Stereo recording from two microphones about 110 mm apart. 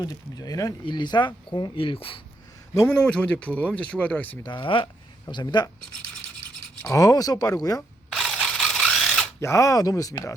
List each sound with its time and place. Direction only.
0.0 s speech: 35° left (ahead or behind); by 2.2 s 55° left (ahead or behind)
2.9 s speech: 10° left (ahead or behind)
4.4 s speech: 50° left (ahead or behind)
6.8 s speech: 30° left (ahead or behind)
8.1 s a sound: centre (ahead or behind)
9.4 s speech: 25° left (ahead or behind)